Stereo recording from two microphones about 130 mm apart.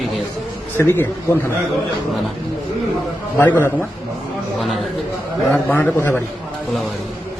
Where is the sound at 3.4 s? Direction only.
15° left (ahead or behind).